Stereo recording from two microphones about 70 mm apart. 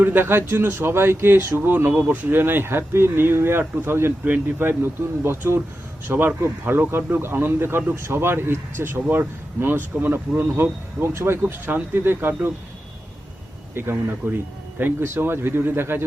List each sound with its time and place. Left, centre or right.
0.0 s speech: right
13.8 s speech: right